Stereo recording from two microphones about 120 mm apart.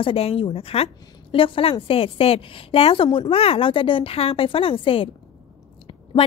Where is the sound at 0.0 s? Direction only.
50° left (ahead or behind).